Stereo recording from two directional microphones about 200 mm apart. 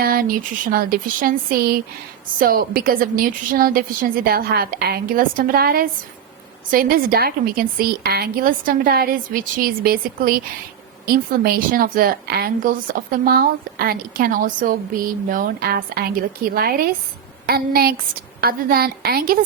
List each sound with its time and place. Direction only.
0.0 s a woman's voice: 45° right (ahead or behind)